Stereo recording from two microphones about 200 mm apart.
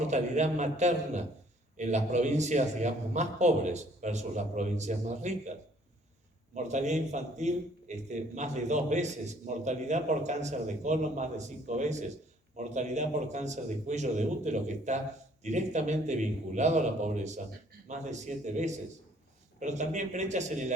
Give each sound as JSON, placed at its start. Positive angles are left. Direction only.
{"t": 0.0, "sound": "a man's voice", "side_deg": -35}